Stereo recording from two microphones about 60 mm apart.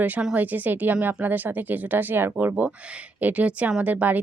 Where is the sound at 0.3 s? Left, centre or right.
Right.